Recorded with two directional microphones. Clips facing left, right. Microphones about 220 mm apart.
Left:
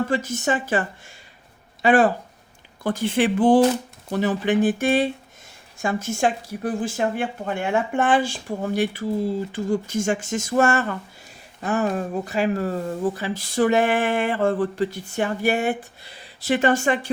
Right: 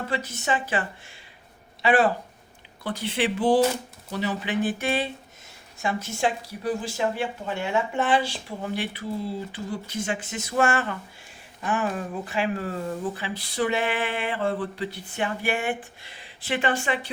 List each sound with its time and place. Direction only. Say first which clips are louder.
0.1 s speech: left 5 dB; 45° left (ahead or behind)